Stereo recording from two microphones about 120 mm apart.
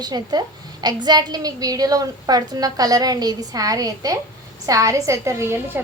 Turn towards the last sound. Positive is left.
turn(degrees=-20)  # may be behind; listen again after turning